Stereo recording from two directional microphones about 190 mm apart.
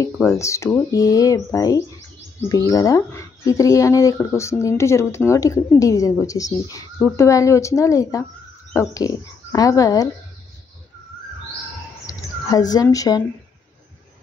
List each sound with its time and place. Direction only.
0.0 s speech: 15° left (ahead or behind)
12.1 s speech: 20° left (ahead or behind)